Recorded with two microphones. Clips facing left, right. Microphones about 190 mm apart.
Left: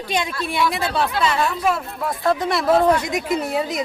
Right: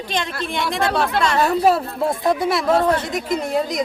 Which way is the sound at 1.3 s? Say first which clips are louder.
Right 5 dB; 40° right (ahead or behind).